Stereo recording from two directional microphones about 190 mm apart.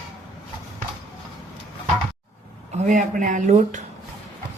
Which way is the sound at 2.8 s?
40° right (ahead or behind).